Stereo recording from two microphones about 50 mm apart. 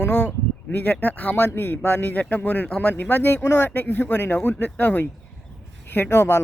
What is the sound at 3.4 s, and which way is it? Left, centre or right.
Speech, left.